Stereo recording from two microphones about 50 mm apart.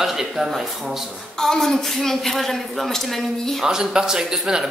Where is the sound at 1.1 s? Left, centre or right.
Centre.